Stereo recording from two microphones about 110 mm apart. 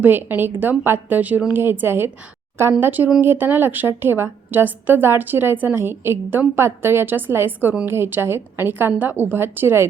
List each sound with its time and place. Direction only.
0.0 s a woman's voice: 20° right (ahead or behind)